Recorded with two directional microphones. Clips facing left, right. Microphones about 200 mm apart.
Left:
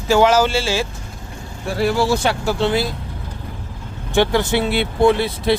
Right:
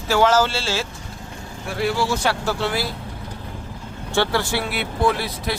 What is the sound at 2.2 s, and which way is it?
Speech, 20° left (ahead or behind).